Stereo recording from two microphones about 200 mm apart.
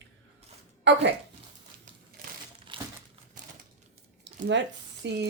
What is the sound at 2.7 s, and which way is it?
Crumpling, 25° right (ahead or behind).